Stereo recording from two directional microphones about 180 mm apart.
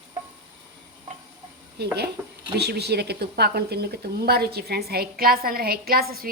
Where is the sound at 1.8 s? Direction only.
65° right (ahead or behind).